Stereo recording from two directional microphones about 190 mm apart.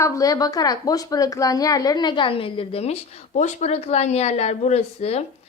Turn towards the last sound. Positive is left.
turn(degrees=35)  # may be behind; listen again after turning